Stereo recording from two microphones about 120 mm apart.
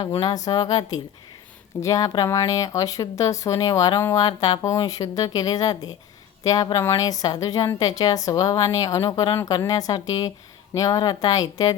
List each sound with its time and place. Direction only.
0.2 s a woman's voice: 35° left (ahead or behind)